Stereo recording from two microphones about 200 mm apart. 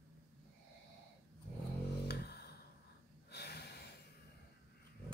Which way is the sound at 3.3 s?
55° left (ahead or behind).